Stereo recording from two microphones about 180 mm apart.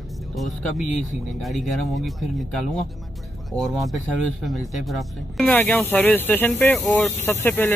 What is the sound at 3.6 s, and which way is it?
Speech, centre (ahead or behind).